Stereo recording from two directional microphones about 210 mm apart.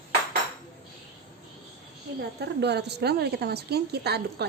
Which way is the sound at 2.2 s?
50° right (ahead or behind).